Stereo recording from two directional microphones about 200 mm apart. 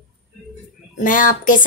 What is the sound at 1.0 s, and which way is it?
Speech, 40° left (ahead or behind).